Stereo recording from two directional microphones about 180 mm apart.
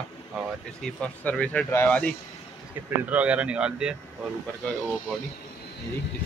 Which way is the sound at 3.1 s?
5° right (ahead or behind).